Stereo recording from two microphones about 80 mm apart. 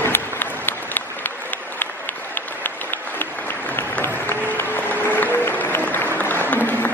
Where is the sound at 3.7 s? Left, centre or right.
Left.